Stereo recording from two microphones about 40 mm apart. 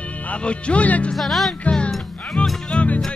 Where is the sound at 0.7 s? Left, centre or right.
Left.